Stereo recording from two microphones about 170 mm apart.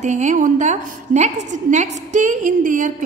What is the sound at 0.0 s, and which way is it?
A woman's voice, 45° right (ahead or behind).